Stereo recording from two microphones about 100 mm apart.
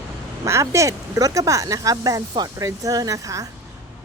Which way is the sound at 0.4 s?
30° right (ahead or behind).